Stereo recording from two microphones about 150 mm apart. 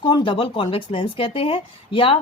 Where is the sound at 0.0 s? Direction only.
30° left (ahead or behind).